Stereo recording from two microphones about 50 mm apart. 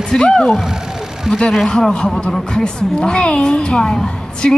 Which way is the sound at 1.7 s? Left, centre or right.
Centre.